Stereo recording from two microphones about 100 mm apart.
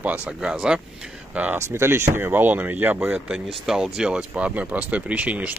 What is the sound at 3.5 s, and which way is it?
Speech, 5° right (ahead or behind).